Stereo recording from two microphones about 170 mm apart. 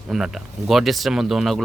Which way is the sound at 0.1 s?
Centre (ahead or behind).